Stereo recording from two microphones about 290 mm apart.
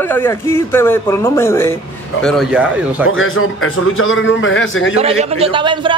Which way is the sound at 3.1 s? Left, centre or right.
Left.